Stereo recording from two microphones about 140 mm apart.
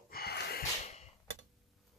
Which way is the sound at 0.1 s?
90° left.